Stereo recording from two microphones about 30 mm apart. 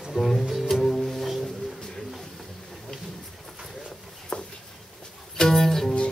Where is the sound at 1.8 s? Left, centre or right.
Centre.